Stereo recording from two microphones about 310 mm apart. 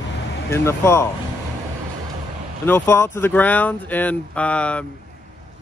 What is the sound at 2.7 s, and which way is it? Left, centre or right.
Speech, centre.